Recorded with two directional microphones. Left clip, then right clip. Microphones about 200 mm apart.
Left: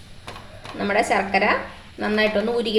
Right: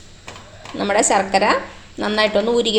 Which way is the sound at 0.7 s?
30° right (ahead or behind).